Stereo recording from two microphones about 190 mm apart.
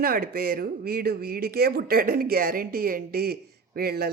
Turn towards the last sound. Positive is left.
turn(degrees=-55)  # may be behind; listen again after turning